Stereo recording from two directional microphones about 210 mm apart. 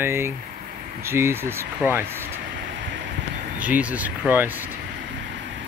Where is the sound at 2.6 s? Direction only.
60° right (ahead or behind).